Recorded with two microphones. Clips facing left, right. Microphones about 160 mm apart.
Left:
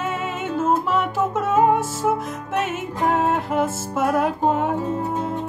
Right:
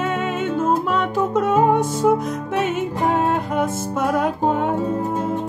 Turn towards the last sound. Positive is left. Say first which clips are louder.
# right 1 dB
turn(degrees=5)  # may be behind; listen again after turning